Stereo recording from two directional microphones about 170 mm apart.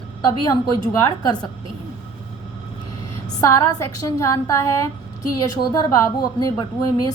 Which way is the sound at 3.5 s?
20° left (ahead or behind).